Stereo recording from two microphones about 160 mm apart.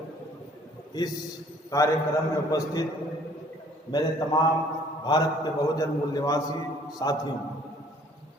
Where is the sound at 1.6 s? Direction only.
20° left (ahead or behind).